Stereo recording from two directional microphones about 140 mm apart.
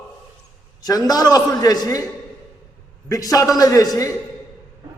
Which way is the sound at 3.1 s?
25° left (ahead or behind).